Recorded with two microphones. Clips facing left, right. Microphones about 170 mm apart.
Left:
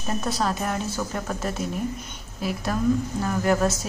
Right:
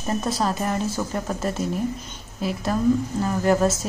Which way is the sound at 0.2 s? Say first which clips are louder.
Right 2 dB; centre (ahead or behind).